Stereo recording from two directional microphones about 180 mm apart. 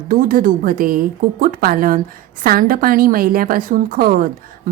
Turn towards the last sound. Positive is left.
turn(degrees=-50)  # may be behind; listen again after turning